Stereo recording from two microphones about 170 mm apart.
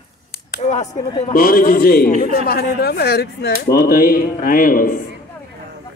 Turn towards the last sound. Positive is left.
turn(degrees=55)  # may be behind; listen again after turning